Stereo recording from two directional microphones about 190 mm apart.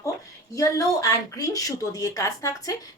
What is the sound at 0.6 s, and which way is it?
Speech, 20° left (ahead or behind).